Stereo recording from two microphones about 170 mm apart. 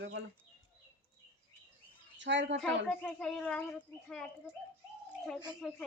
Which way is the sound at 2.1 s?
90° right.